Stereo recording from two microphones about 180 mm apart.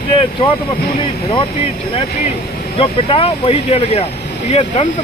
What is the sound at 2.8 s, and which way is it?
Speech, 30° left (ahead or behind).